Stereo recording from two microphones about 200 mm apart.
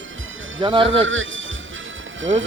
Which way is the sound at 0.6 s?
25° right (ahead or behind).